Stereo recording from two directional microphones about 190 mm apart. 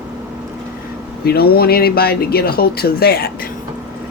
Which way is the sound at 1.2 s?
55° left (ahead or behind).